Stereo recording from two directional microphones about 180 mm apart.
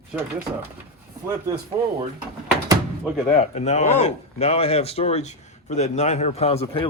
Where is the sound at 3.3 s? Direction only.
40° left (ahead or behind).